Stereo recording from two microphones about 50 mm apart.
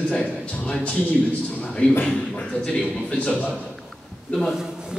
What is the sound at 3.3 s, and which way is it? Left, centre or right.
Speech, right.